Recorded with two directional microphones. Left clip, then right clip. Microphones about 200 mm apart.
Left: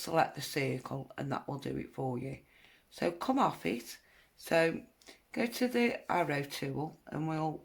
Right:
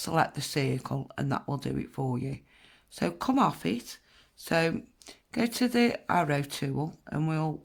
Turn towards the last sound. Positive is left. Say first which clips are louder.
# right 3 dB
turn(degrees=-35)  # may be behind; listen again after turning